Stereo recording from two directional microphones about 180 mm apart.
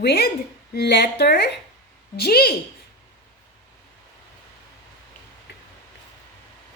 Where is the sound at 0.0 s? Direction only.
60° left (ahead or behind).